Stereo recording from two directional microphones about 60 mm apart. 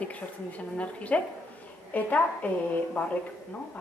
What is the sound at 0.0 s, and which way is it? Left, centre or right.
A woman's voice, left.